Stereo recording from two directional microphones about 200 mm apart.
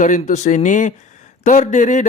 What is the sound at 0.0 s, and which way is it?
Speech, 40° left (ahead or behind).